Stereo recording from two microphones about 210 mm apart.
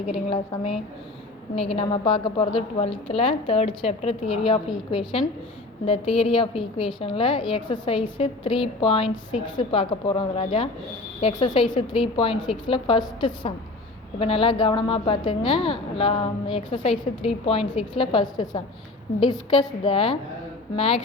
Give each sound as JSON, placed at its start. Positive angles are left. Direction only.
{"t": 0.3, "sound": "a woman's voice", "side_deg": 25}